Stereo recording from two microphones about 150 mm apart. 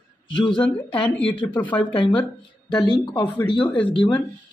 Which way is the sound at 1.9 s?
35° left (ahead or behind).